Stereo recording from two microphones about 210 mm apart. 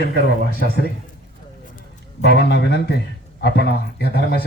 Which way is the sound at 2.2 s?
55° left (ahead or behind).